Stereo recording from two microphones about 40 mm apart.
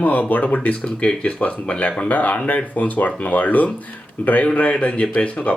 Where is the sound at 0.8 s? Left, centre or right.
Left.